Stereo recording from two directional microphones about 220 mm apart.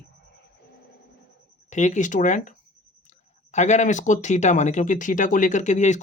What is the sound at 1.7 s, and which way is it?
Speech, 35° left (ahead or behind).